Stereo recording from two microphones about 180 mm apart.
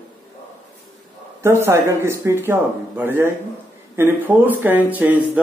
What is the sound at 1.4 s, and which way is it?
Speech, 15° right (ahead or behind).